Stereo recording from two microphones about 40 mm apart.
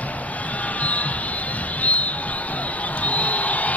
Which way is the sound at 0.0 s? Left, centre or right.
Left.